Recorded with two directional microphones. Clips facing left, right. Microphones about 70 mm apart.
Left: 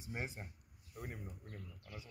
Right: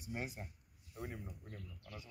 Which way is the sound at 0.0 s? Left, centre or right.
Left.